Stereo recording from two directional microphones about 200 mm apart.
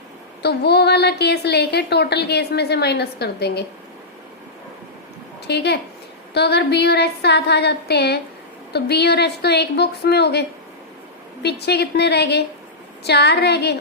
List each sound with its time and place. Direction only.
0.4 s a woman's voice: 55° left (ahead or behind)
5.5 s a woman's voice: 55° left (ahead or behind)
11.4 s a woman's voice: 55° left (ahead or behind)